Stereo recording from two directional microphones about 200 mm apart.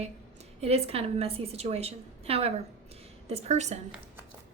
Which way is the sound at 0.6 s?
30° right (ahead or behind).